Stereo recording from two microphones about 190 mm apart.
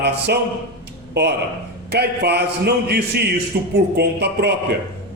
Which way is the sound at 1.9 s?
60° right (ahead or behind).